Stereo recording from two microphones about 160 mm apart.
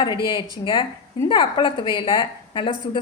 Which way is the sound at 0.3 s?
30° left (ahead or behind).